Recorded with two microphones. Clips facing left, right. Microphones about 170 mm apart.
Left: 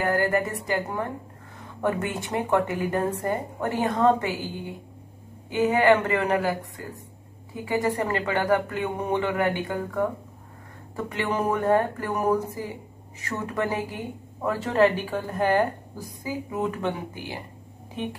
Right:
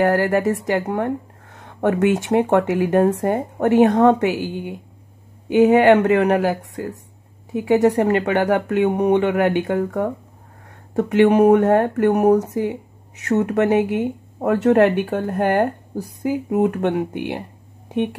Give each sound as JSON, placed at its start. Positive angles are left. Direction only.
{"t": 0.0, "sound": "speech", "side_deg": -80}
{"t": 5.5, "sound": "speech", "side_deg": -75}
{"t": 11.0, "sound": "speech", "side_deg": -70}